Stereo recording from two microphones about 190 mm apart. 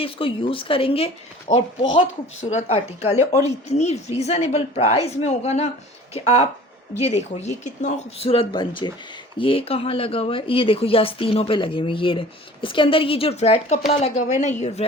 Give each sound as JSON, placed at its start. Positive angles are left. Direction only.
{"t": 0.0, "sound": "a woman's voice", "side_deg": 30}